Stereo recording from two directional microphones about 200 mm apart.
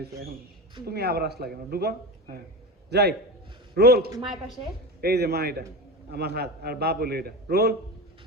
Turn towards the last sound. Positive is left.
turn(degrees=-50)  # may be behind; listen again after turning